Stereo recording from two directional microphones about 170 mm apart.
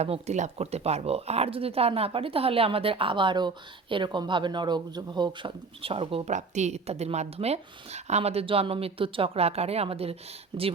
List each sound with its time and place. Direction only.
0.0 s speech: 40° right (ahead or behind)